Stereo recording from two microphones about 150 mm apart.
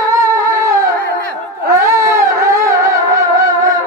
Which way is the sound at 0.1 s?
20° right (ahead or behind).